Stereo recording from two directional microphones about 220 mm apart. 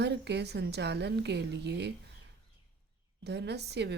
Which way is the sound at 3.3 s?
50° right (ahead or behind).